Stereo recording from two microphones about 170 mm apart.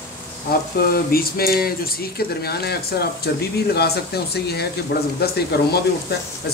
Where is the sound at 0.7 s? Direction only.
65° left (ahead or behind).